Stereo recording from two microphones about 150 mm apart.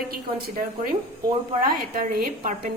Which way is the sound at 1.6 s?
80° right.